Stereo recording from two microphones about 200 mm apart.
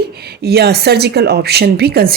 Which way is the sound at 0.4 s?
55° right (ahead or behind).